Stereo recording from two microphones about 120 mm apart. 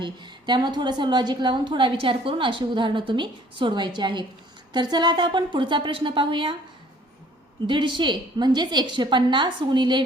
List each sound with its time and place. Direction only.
0.0 s a woman's voice: 40° right (ahead or behind)
7.7 s a woman's voice: 40° right (ahead or behind)